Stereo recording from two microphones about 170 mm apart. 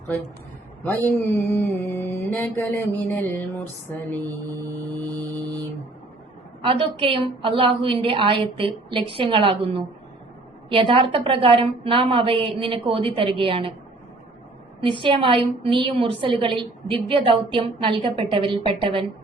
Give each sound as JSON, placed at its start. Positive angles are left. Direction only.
{"t": 0.9, "sound": "mantra", "side_deg": 10}
{"t": 4.6, "sound": "mantra", "side_deg": 10}
{"t": 5.1, "sound": "mantra", "side_deg": -20}
{"t": 6.6, "sound": "a woman's voice", "side_deg": -30}
{"t": 15.0, "sound": "a woman's voice", "side_deg": -30}